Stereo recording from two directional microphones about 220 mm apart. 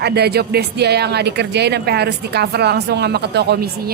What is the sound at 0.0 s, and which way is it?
Speech, 45° right (ahead or behind).